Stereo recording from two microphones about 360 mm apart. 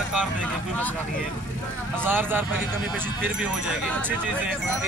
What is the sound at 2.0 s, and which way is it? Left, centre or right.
Speech, centre.